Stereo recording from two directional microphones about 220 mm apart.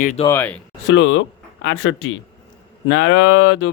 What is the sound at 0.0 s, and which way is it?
Speech, 35° left (ahead or behind).